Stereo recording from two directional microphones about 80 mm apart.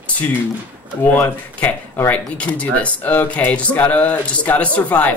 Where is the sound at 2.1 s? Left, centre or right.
Centre.